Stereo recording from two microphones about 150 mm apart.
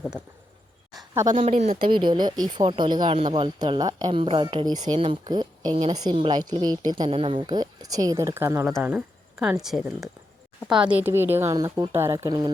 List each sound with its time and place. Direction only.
1.4 s speech: 45° right (ahead or behind)
1.8 s a woman's voice: 30° right (ahead or behind)
4.2 s a woman's voice: 35° right (ahead or behind); by 8.6 s 20° right (ahead or behind)
8.6 s speech: 10° right (ahead or behind)
11.5 s a woman's voice: 25° right (ahead or behind)